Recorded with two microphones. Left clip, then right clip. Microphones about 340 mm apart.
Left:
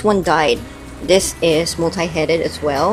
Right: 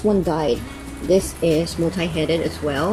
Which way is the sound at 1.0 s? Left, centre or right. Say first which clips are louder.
Left 4 dB; left.